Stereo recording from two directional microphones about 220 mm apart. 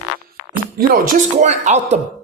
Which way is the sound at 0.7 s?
40° right (ahead or behind).